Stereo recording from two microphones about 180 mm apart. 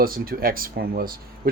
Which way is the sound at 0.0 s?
55° right (ahead or behind).